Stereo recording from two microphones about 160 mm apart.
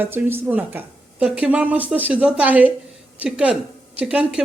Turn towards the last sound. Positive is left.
turn(degrees=-5)  # may be behind; listen again after turning